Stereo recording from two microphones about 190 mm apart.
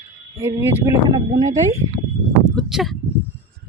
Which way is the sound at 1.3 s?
40° right (ahead or behind).